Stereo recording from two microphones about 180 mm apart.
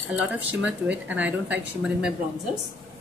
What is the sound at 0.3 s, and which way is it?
A woman's voice, 10° right (ahead or behind).